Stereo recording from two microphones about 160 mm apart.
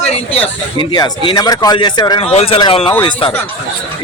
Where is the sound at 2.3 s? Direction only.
40° left (ahead or behind).